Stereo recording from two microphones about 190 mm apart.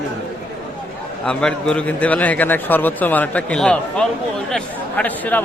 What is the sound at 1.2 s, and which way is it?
A man's voice, 5° left (ahead or behind).